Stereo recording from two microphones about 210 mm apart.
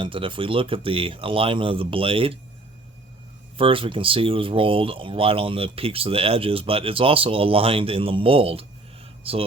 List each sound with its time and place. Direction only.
0.0 s speech: 25° right (ahead or behind)
3.6 s speech: 25° right (ahead or behind)